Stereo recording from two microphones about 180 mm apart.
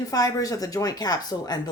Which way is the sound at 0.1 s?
20° left (ahead or behind).